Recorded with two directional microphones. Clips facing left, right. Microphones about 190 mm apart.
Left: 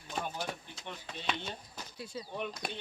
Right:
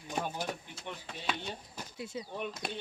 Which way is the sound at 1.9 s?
20° right (ahead or behind).